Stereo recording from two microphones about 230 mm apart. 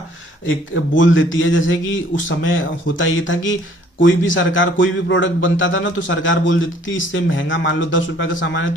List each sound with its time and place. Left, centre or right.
0.9 s a man's voice: left